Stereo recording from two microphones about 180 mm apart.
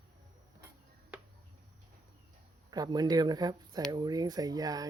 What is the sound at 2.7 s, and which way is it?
Speech, 20° right (ahead or behind).